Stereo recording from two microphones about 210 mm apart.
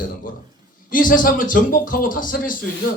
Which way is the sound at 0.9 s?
40° left (ahead or behind).